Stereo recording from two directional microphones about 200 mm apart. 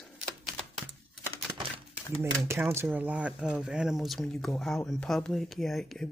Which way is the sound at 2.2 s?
10° right (ahead or behind).